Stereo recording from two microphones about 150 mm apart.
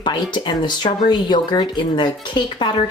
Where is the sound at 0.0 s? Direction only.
30° left (ahead or behind).